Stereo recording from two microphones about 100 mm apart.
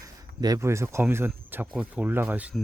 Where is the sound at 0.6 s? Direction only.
25° right (ahead or behind).